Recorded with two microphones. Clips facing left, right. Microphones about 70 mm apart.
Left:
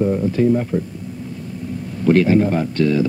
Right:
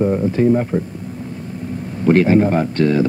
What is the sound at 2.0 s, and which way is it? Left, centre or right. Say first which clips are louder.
A man's voice: right 1 dB; right.